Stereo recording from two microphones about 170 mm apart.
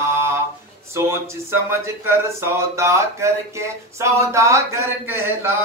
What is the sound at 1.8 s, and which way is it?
Speech, 15° right (ahead or behind).